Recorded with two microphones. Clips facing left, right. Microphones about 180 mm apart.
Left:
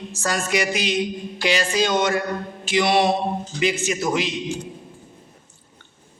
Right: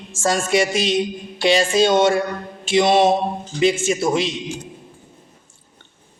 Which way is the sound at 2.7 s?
20° right (ahead or behind).